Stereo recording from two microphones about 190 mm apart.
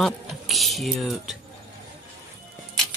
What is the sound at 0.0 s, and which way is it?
Speech, centre (ahead or behind).